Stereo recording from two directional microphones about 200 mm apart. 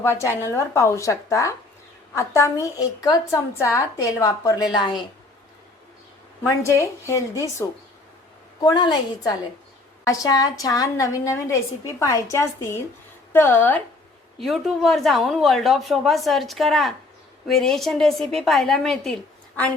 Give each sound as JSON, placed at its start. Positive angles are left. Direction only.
{"t": 0.0, "sound": "a woman's voice", "side_deg": 15}
{"t": 6.4, "sound": "a woman's voice", "side_deg": 15}
{"t": 8.6, "sound": "a woman's voice", "side_deg": 20}